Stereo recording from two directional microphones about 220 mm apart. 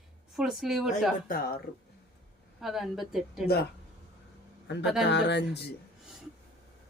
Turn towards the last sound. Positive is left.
turn(degrees=50)  # may be behind; listen again after turning